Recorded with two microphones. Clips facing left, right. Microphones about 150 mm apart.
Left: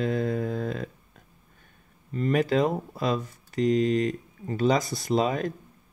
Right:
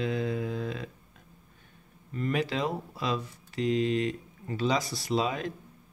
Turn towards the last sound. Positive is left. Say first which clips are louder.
# left 4 dB
turn(degrees=45)  # may be behind; listen again after turning